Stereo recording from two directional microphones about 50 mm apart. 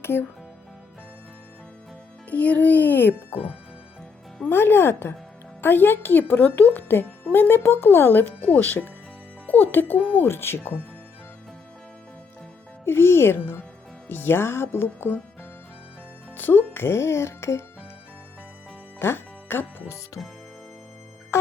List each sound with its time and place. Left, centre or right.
0.0 s speech: left
2.3 s speech: left
4.4 s speech: left
10.0 s speech: left
10.2 s speech: left
12.8 s speech: left
16.4 s speech: left
18.9 s music: left
20.2 s speech: centre